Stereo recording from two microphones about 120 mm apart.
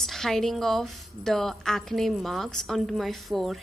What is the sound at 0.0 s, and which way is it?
A woman's voice, centre (ahead or behind).